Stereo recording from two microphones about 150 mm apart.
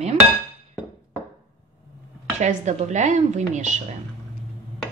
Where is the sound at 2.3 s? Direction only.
50° right (ahead or behind).